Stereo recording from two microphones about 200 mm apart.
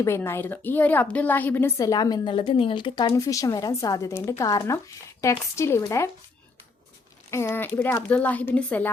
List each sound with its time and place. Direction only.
0.0 s a woman's voice: 15° left (ahead or behind)
7.3 s a woman's voice: 15° left (ahead or behind)